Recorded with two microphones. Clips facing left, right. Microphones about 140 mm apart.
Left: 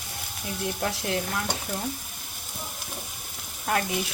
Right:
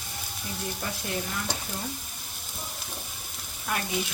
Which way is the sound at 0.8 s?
60° left (ahead or behind).